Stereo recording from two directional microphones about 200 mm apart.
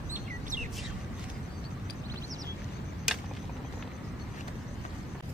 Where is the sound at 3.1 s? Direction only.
5° right (ahead or behind).